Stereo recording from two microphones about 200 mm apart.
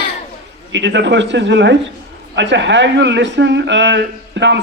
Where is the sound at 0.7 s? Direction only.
65° right (ahead or behind).